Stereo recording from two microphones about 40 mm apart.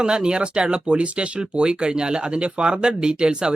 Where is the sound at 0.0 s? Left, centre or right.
Right.